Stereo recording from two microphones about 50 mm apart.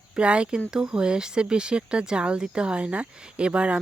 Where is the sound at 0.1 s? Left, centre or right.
Right.